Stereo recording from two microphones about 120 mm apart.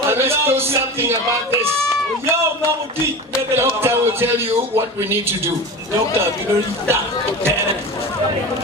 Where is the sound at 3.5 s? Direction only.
20° right (ahead or behind).